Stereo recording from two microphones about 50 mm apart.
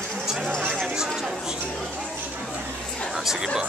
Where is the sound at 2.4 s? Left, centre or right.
Centre.